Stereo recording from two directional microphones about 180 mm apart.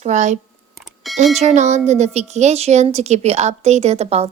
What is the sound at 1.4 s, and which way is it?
A woman's voice, 40° right (ahead or behind).